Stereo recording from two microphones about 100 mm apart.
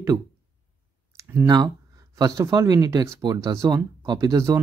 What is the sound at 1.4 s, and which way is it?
Speech, 40° right (ahead or behind).